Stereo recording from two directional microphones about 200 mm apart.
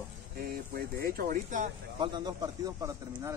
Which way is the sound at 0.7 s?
50° right (ahead or behind).